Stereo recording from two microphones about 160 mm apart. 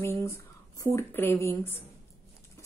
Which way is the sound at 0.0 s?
15° left (ahead or behind).